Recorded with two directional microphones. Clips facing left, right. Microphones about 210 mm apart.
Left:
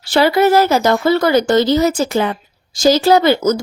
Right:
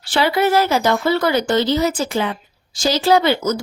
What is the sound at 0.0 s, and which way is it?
Speech, 40° left (ahead or behind).